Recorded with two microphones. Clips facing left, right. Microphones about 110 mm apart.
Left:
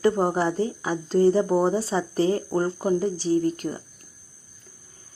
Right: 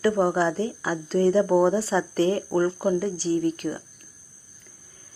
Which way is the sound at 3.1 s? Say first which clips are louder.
Left 2 dB; 35° right (ahead or behind).